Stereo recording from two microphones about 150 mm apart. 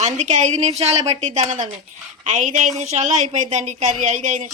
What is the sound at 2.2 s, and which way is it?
Speech, 60° right (ahead or behind).